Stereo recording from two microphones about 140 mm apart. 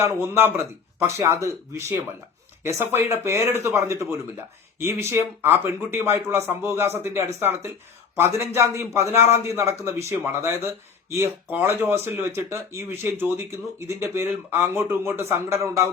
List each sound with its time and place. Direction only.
0.0 s a man's voice: 20° right (ahead or behind)